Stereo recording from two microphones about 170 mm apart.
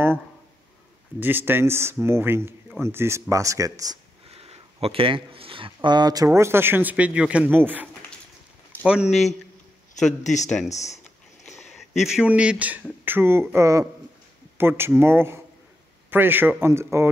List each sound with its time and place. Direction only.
1.2 s speech: 10° right (ahead or behind)
4.3 s speech: 35° right (ahead or behind); by 9.2 s 5° right (ahead or behind)
10.2 s speech: 45° left (ahead or behind)
11.7 s speech: centre (ahead or behind)